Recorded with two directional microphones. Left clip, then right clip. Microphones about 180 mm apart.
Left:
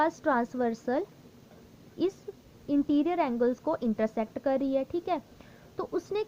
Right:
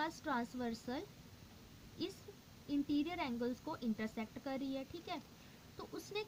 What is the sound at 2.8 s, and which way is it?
A woman's voice, 20° left (ahead or behind).